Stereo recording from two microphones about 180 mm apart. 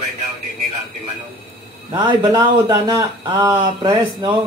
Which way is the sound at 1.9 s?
20° right (ahead or behind).